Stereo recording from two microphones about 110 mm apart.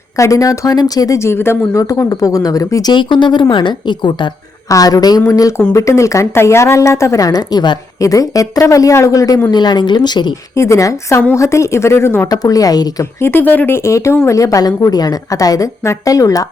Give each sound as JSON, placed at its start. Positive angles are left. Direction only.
{"t": 0.2, "sound": "speech", "side_deg": 30}
{"t": 2.9, "sound": "speech", "side_deg": 45}
{"t": 4.7, "sound": "speech", "side_deg": 35}
{"t": 10.5, "sound": "speech", "side_deg": 25}
{"t": 13.1, "sound": "speech", "side_deg": 20}